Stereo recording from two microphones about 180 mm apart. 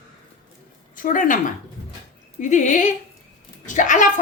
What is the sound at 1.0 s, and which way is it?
Speech, 50° left (ahead or behind).